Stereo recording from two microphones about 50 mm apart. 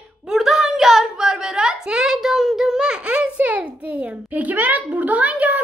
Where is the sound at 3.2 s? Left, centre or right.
Right.